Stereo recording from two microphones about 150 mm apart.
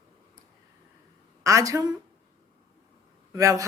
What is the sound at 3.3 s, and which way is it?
Speech, 20° right (ahead or behind).